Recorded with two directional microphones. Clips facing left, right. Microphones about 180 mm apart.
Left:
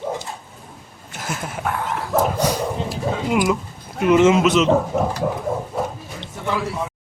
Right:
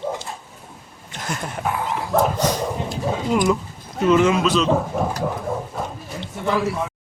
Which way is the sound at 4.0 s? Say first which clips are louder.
Left 2 dB; 20° left (ahead or behind).